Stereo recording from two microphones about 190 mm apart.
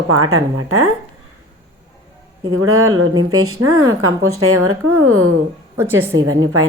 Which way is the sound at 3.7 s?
20° right (ahead or behind).